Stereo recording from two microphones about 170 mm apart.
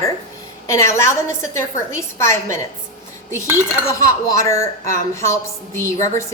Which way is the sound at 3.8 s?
20° left (ahead or behind).